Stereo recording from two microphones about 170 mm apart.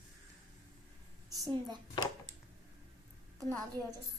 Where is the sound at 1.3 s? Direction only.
20° right (ahead or behind).